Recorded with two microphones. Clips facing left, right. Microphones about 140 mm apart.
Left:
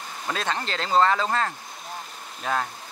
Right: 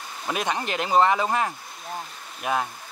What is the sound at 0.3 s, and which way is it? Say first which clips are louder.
Speech: right 2 dB; 15° right (ahead or behind).